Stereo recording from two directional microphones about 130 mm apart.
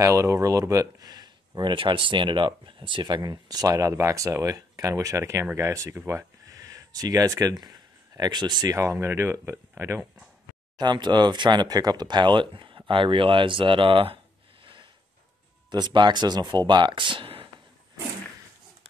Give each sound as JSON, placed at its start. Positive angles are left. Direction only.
{"t": 0.0, "sound": "speech", "side_deg": -25}
{"t": 10.8, "sound": "speech", "side_deg": -35}